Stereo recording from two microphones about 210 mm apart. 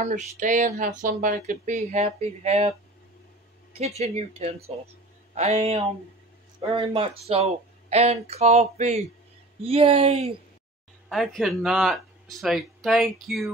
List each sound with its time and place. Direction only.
0.0 s speech: 35° right (ahead or behind)
4.0 s speech: 30° right (ahead or behind)
11.1 s speech: centre (ahead or behind)